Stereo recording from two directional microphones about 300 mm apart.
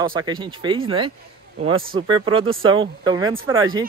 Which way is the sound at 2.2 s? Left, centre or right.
Centre.